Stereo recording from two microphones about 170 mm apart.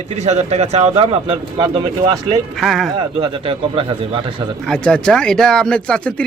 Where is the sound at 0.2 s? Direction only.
40° right (ahead or behind); by 2.4 s 25° right (ahead or behind).